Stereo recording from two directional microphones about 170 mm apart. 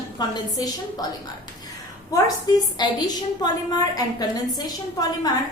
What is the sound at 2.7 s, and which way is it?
A woman's voice, 25° left (ahead or behind).